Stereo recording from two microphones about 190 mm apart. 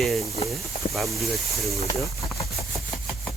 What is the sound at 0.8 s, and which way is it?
Speech, 50° left (ahead or behind).